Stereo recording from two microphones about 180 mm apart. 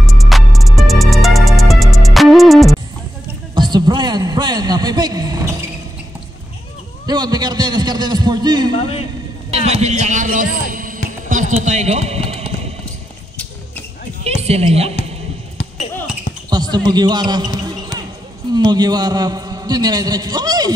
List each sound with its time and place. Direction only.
0.0 s music: centre (ahead or behind)
3.5 s a sound: 25° right (ahead or behind)
7.1 s a man's voice: 20° right (ahead or behind)
8.7 s a man's voice: 35° left (ahead or behind)
9.5 s speech: 35° right (ahead or behind)
11.2 s a sound: 45° right (ahead or behind)
11.6 s speech: 40° right (ahead or behind)
14.2 s a woman's voice: 35° right (ahead or behind)
16.4 s basketball bounce: 25° right (ahead or behind)
18.5 s a man's voice: 25° right (ahead or behind)